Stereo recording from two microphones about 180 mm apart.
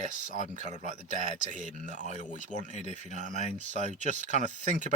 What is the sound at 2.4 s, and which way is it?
Speech, 45° right (ahead or behind).